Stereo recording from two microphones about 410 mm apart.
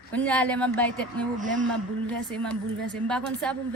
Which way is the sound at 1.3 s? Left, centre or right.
Centre.